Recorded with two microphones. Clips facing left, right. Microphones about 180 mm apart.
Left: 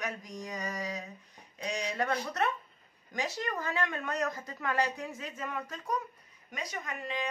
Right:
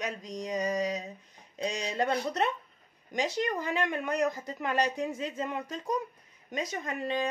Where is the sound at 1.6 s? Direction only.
25° right (ahead or behind).